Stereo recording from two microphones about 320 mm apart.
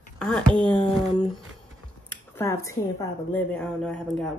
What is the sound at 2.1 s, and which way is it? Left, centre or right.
Speech, centre.